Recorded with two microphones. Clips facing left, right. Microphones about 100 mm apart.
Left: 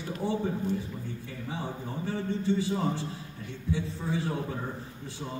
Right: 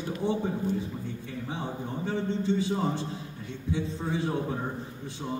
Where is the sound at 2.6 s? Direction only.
20° right (ahead or behind).